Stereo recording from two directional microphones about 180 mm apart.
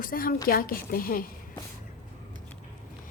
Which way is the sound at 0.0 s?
50° left (ahead or behind).